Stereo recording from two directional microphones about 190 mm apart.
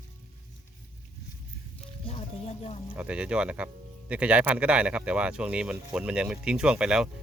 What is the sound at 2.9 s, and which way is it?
Speech, 5° right (ahead or behind).